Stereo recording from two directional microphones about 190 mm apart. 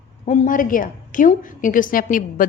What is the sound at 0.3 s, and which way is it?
A woman's voice, 45° left (ahead or behind).